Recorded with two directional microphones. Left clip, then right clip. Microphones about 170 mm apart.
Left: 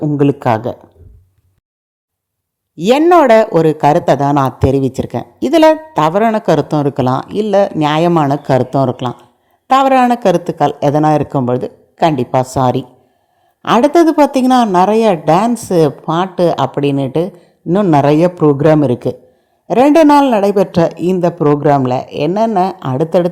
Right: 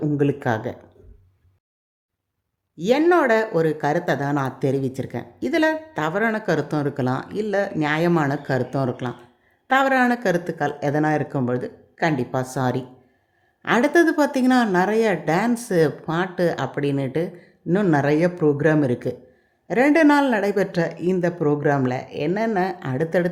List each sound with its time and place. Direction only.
0.2 s speech: 30° left (ahead or behind)
2.7 s a woman's voice: 35° left (ahead or behind)
17.7 s speech: 20° left (ahead or behind)
17.9 s speech: 30° left (ahead or behind)